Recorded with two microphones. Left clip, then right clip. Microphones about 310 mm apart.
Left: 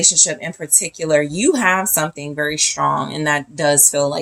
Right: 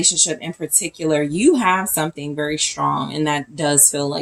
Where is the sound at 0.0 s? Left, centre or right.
Left.